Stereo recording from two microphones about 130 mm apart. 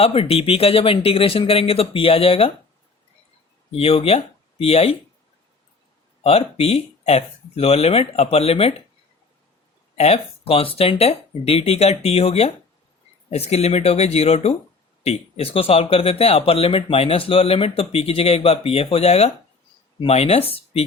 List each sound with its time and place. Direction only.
0.0 s speech: 50° left (ahead or behind)
3.7 s speech: 50° left (ahead or behind)
6.2 s speech: 50° left (ahead or behind)
9.9 s speech: 50° left (ahead or behind)